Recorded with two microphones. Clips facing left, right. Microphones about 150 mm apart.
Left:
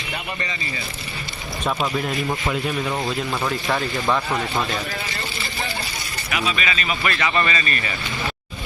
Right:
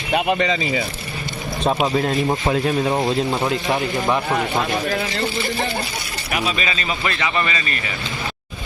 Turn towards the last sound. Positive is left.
turn(degrees=-15)  # may be behind; listen again after turning